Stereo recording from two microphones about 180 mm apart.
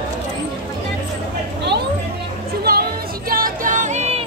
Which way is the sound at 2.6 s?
60° right (ahead or behind).